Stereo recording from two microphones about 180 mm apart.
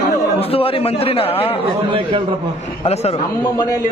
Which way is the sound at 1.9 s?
30° right (ahead or behind).